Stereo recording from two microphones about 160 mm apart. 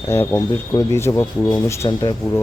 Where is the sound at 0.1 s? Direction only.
15° left (ahead or behind).